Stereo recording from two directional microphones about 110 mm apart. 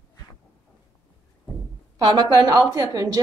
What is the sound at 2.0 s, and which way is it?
A woman's voice, 40° right (ahead or behind).